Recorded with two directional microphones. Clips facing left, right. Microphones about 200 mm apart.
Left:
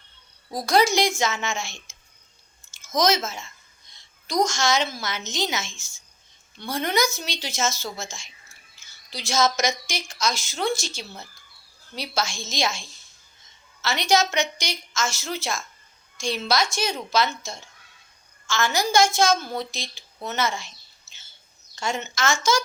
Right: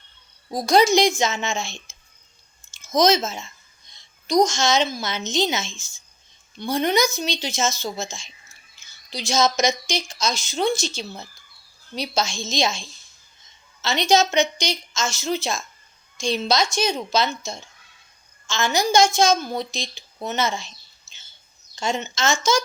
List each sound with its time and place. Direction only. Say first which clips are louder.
0.5 s a woman's voice: right 4 dB; 20° right (ahead or behind)
2.8 s a woman's voice: right 4 dB; 20° right (ahead or behind)
13.8 s a woman's voice: right 3 dB; 20° right (ahead or behind)
21.1 s a sound: right 1 dB; 20° right (ahead or behind)
21.8 s a woman's voice: right 2 dB; 20° right (ahead or behind)